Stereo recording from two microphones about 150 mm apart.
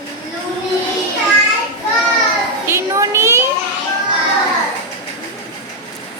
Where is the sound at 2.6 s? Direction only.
20° right (ahead or behind).